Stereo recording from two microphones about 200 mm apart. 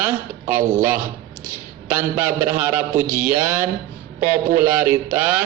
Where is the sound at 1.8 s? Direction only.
10° right (ahead or behind).